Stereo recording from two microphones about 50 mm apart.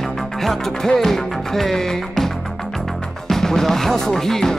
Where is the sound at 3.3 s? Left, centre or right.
Centre.